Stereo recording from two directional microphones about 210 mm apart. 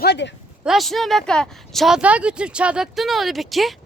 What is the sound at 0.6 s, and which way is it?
Speech, centre (ahead or behind).